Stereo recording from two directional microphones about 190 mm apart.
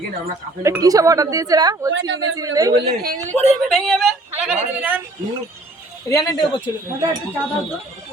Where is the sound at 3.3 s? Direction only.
5° left (ahead or behind).